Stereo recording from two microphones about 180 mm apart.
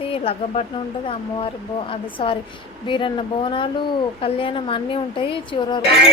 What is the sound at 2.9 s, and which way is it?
Speech, 25° left (ahead or behind).